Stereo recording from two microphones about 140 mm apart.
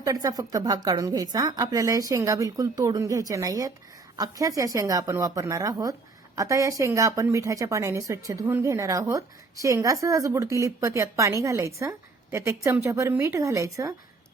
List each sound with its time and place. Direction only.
0.0 s a woman's voice: 25° right (ahead or behind)